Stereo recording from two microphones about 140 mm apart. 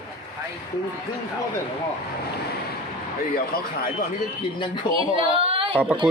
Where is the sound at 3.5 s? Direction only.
90° left.